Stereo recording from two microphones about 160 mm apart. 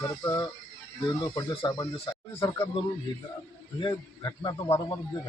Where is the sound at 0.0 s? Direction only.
20° left (ahead or behind).